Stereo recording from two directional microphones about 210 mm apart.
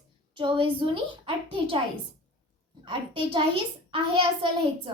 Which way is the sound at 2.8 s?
25° right (ahead or behind).